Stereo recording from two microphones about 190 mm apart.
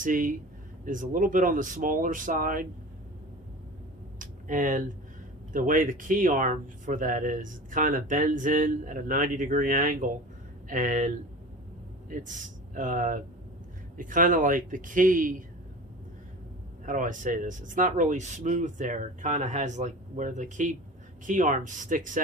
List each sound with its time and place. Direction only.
0.0 s speech: 45° right (ahead or behind)
4.2 s a sound: 45° right (ahead or behind)
5.5 s a man's voice: 45° right (ahead or behind)
16.8 s speech: 45° right (ahead or behind)